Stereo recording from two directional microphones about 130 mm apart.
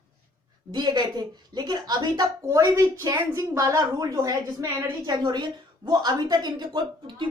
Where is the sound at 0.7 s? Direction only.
35° right (ahead or behind).